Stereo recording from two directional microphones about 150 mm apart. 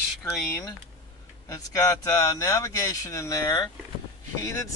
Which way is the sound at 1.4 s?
25° left (ahead or behind).